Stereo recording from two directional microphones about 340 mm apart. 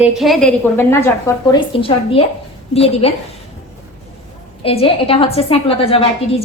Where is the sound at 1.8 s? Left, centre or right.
Centre.